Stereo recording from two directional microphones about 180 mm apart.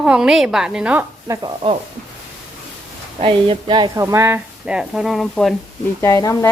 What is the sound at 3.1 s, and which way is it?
Speech, 30° right (ahead or behind).